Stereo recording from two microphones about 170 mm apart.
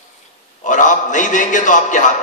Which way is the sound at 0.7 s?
50° left (ahead or behind).